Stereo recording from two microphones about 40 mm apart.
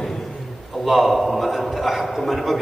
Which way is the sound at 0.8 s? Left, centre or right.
Centre.